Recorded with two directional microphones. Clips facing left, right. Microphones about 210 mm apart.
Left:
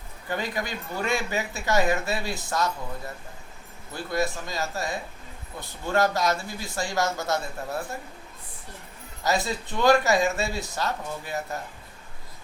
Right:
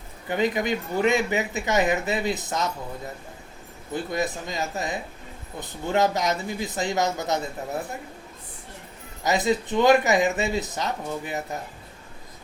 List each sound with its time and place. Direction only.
0.3 s speech: 20° right (ahead or behind)
3.9 s speech: 20° right (ahead or behind)
9.2 s speech: 20° right (ahead or behind)